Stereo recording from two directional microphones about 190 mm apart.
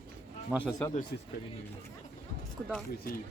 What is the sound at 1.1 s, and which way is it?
Speech, 55° left (ahead or behind).